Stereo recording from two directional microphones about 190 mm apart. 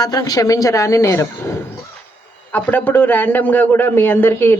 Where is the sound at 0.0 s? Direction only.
20° left (ahead or behind).